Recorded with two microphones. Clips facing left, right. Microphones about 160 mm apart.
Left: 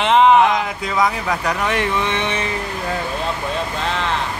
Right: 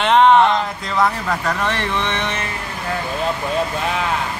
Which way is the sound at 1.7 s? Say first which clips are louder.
Left 2 dB; 10° left (ahead or behind).